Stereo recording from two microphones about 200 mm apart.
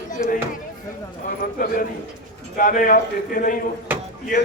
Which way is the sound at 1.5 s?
45° left (ahead or behind).